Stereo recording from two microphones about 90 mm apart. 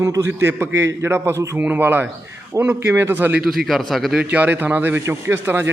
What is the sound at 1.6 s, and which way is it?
A man's voice, 20° right (ahead or behind).